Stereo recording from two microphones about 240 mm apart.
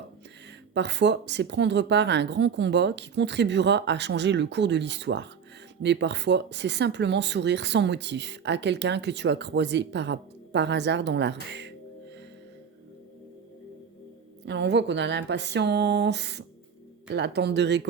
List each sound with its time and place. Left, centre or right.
0.7 s speech: right
14.4 s speech: right